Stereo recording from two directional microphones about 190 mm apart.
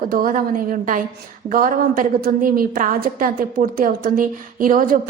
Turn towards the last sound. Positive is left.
turn(degrees=-45)  # may be behind; listen again after turning